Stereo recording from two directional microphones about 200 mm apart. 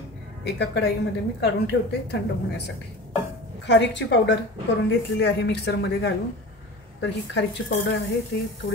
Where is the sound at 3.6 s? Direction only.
60° left (ahead or behind).